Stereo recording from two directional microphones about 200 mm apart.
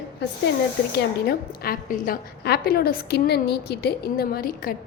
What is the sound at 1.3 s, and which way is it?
A woman's voice, 45° left (ahead or behind).